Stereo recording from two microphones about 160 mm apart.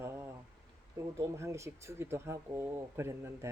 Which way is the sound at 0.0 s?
15° right (ahead or behind).